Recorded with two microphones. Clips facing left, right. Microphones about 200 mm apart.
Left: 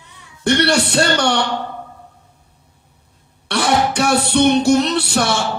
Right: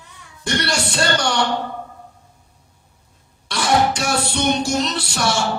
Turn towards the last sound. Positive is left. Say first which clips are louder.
# left 4 dB
turn(degrees=60)  # may be behind; listen again after turning